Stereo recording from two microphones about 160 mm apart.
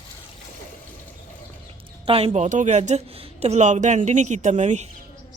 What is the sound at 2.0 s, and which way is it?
A woman's voice, 40° right (ahead or behind).